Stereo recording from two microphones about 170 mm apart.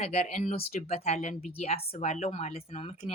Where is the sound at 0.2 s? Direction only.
45° left (ahead or behind).